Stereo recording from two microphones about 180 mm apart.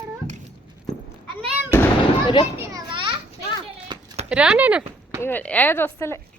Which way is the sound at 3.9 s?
25° right (ahead or behind).